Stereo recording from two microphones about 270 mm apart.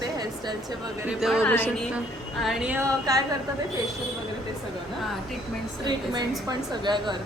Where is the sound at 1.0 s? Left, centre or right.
Centre.